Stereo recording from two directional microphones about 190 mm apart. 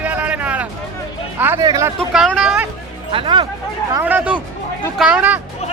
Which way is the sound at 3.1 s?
25° right (ahead or behind).